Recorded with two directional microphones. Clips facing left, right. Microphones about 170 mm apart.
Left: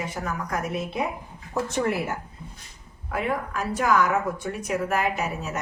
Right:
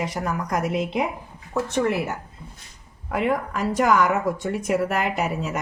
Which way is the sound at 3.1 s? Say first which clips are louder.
Right 4 dB; 80° right.